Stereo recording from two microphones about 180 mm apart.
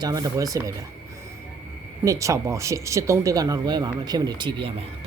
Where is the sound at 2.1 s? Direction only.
15° right (ahead or behind).